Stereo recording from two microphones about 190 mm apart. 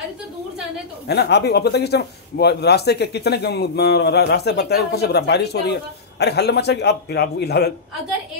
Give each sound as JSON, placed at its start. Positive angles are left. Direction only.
{"t": 1.0, "sound": "speech", "side_deg": 60}